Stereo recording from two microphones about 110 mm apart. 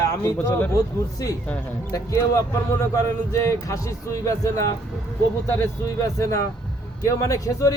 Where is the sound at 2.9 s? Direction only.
25° left (ahead or behind).